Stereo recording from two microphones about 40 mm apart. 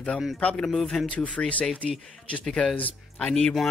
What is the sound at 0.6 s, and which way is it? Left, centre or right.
Speech, centre.